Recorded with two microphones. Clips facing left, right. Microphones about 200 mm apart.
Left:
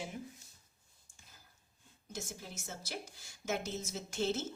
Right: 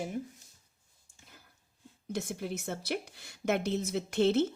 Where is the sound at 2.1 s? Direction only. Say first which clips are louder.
Right 10 dB; 60° right (ahead or behind).